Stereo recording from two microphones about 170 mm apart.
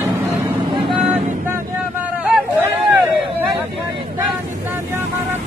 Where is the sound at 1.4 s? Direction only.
10° right (ahead or behind).